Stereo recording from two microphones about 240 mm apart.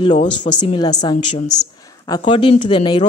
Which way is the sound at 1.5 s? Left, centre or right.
Centre.